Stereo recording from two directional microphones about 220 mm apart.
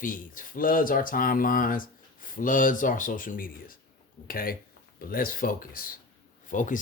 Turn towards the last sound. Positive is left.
turn(degrees=35)  # may be behind; listen again after turning